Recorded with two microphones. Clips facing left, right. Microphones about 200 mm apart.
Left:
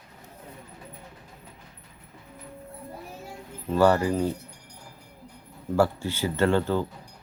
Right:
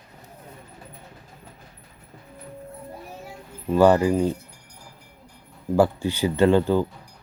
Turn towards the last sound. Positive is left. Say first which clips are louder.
# right 5 dB
turn(degrees=-15)  # may be behind; listen again after turning